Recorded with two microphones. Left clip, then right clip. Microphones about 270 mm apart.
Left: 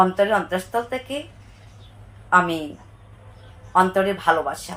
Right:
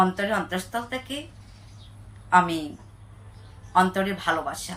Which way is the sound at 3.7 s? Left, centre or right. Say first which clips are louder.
Left 4 dB; centre.